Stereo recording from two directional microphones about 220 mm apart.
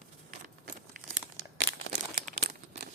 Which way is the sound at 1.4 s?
50° right (ahead or behind).